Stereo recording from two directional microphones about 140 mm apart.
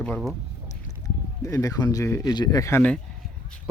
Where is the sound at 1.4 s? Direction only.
25° left (ahead or behind).